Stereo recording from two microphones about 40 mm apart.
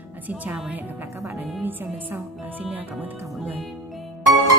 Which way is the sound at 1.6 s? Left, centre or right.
Right.